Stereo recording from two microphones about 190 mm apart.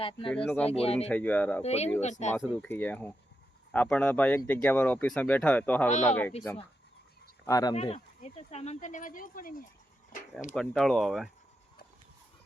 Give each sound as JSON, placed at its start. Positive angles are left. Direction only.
{"t": 0.0, "sound": "speech", "side_deg": 25}
{"t": 0.4, "sound": "speech", "side_deg": 5}
{"t": 0.7, "sound": "speech", "side_deg": 30}
{"t": 1.0, "sound": "speech", "side_deg": 5}
{"t": 1.6, "sound": "speech", "side_deg": 35}
{"t": 2.3, "sound": "speech", "side_deg": 5}
{"t": 7.4, "sound": "speech", "side_deg": 20}
{"t": 7.8, "sound": "speech", "side_deg": 35}
{"t": 10.5, "sound": "speech", "side_deg": 0}